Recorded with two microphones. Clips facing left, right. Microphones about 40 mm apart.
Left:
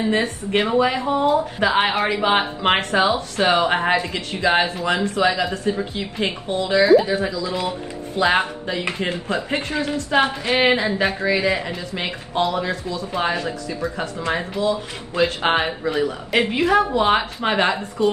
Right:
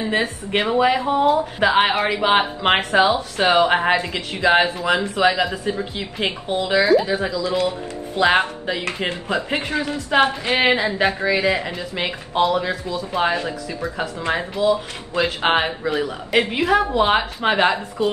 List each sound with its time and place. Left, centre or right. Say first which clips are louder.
0.0 s speech: left 1 dB; centre
6.8 s a woman's voice: left 3 dB; centre
10.6 s a woman's voice: right 1 dB; centre